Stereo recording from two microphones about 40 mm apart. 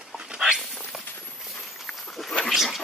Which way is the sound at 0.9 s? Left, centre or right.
Centre.